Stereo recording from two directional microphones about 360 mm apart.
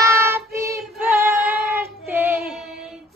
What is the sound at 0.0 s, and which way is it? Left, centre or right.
Child singing, centre.